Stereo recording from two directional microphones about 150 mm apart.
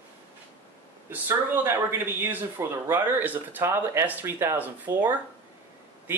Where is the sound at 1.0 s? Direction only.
15° right (ahead or behind).